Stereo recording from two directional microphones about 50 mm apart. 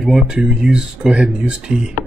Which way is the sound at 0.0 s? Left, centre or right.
Centre.